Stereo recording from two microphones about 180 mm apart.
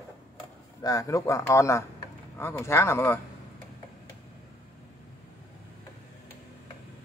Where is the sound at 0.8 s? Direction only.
20° left (ahead or behind).